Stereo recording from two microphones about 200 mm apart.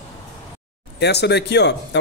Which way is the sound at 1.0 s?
55° left (ahead or behind).